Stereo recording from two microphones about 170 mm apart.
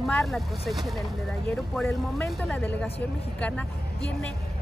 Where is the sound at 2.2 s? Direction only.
10° left (ahead or behind).